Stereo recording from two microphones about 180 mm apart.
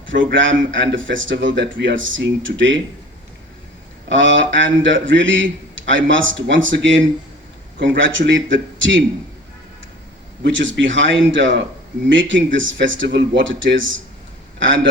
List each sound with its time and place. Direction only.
0.1 s speech: 90° right
4.1 s a man's voice: 90° right
10.4 s speech: 90° right